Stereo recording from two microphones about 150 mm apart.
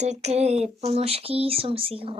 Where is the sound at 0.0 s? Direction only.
50° right (ahead or behind).